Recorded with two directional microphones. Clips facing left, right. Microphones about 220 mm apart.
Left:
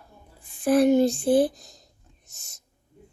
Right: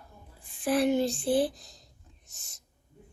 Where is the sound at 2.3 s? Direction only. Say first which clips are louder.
Left 2 dB; 45° left (ahead or behind).